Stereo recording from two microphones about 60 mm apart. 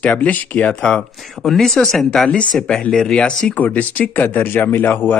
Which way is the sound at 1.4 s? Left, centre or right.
Centre.